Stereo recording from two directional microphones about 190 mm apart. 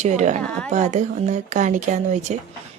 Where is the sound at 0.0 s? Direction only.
35° right (ahead or behind).